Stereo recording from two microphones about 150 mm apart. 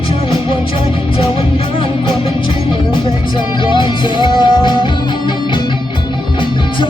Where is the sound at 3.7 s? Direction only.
30° left (ahead or behind).